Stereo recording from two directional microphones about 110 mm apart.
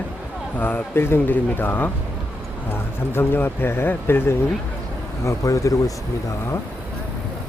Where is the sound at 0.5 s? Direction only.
15° left (ahead or behind).